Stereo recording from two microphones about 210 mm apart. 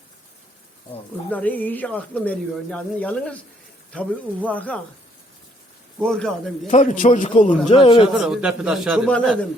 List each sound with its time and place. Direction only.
1.3 s speech: 10° left (ahead or behind)
6.1 s a man's voice: 5° left (ahead or behind)
6.7 s a man's voice: 35° left (ahead or behind)
8.1 s a man's voice: 5° right (ahead or behind)